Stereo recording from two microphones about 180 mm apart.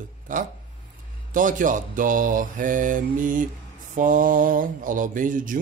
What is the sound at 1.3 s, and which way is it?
Mantra, 45° right (ahead or behind).